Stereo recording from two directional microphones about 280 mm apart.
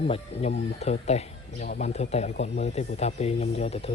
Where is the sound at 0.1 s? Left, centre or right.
Left.